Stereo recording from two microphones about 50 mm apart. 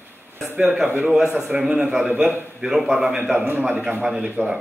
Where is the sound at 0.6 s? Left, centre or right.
Centre.